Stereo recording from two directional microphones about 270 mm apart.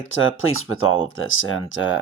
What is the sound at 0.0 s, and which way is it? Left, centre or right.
Speech, left.